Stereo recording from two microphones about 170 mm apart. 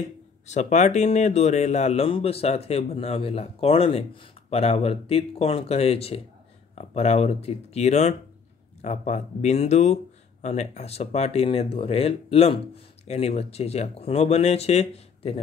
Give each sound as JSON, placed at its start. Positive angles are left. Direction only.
{"t": 0.5, "sound": "speech", "side_deg": 45}